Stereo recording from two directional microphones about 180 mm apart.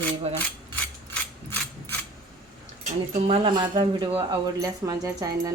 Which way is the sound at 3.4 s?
25° right (ahead or behind).